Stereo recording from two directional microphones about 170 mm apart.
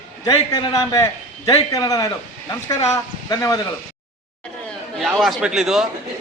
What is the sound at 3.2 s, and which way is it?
Speech, 20° left (ahead or behind).